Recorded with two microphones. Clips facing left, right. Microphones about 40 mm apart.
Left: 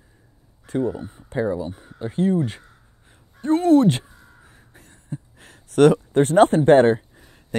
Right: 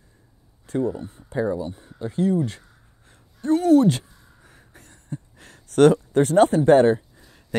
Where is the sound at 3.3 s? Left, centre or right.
Left.